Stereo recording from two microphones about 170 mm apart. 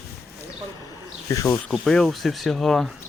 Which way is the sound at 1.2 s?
15° left (ahead or behind).